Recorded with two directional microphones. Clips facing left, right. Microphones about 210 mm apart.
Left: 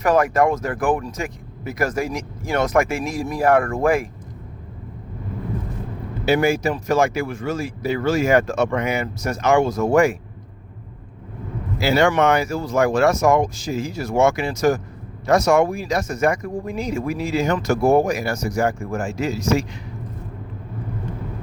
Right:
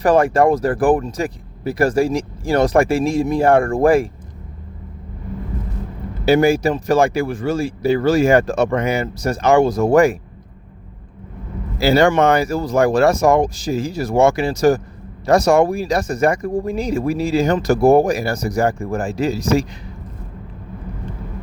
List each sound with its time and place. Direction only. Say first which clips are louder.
0.0 s speech: right 3 dB; 30° right (ahead or behind)
6.2 s speech: right 4 dB; 35° right (ahead or behind)
11.8 s speech: right 4 dB; 35° right (ahead or behind)